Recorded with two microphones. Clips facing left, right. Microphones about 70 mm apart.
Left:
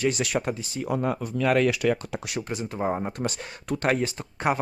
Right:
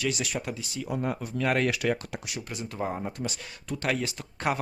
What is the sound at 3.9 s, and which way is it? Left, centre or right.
Speech, left.